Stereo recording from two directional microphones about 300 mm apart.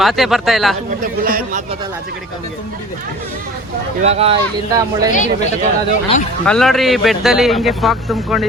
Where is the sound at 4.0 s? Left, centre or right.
Centre.